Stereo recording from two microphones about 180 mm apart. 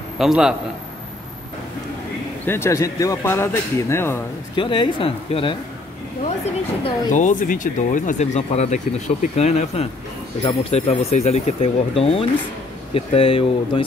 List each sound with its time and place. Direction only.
0.2 s a man's voice: 5° right (ahead or behind)
2.4 s speech: 15° left (ahead or behind)
4.6 s speech: 25° left (ahead or behind)
7.1 s speech: 45° left (ahead or behind)